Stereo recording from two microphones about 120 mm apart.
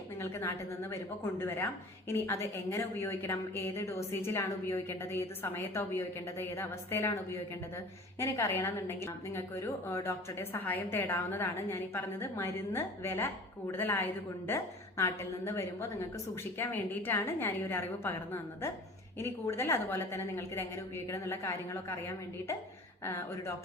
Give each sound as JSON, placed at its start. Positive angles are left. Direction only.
{"t": 0.2, "sound": "a woman's voice", "side_deg": 20}
{"t": 8.2, "sound": "a woman's voice", "side_deg": 20}